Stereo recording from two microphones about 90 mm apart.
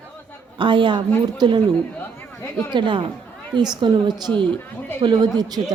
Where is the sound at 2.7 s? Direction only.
65° right (ahead or behind).